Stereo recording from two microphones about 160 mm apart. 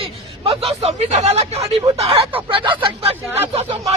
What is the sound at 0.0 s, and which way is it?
Speech, 35° right (ahead or behind).